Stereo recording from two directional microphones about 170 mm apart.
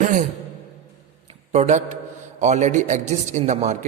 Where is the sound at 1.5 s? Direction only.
40° right (ahead or behind).